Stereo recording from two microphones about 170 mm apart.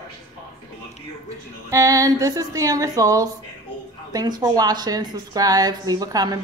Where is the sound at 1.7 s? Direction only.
20° right (ahead or behind).